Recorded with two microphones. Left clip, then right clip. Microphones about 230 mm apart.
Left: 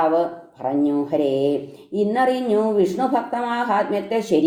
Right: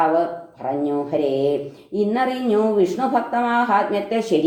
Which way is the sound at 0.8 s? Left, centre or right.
Left.